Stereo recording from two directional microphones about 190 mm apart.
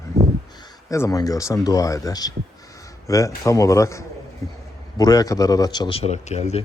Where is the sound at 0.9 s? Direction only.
15° left (ahead or behind).